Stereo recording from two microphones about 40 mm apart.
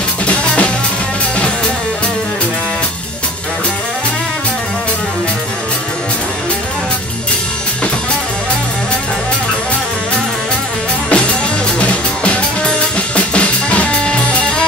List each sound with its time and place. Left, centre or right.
0.3 s drum kit: left
12.6 s drum kit: left